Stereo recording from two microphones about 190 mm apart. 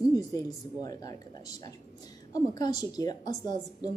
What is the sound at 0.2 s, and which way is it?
Speech, 20° left (ahead or behind).